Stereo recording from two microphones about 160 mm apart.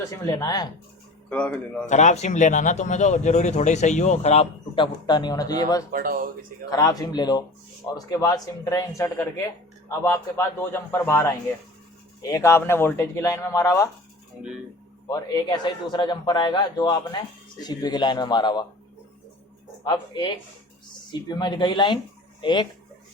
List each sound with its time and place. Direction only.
0.1 s a man's voice: 20° left (ahead or behind)
1.3 s speech: 10° left (ahead or behind)
1.9 s speech: 45° left (ahead or behind); by 5.8 s 25° left (ahead or behind)
5.9 s speech: 65° right (ahead or behind)
6.7 s a man's voice: 25° left (ahead or behind)
15.1 s a man's voice: 25° left (ahead or behind)
19.8 s a man's voice: 30° left (ahead or behind)